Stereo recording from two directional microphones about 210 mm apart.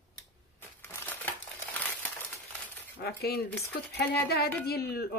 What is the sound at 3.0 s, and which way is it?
A woman's voice, 50° left (ahead or behind).